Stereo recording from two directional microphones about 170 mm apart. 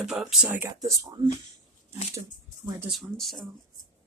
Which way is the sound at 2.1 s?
15° right (ahead or behind).